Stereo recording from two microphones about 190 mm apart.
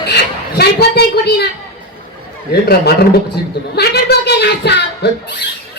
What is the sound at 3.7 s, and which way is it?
Speech, 60° left (ahead or behind).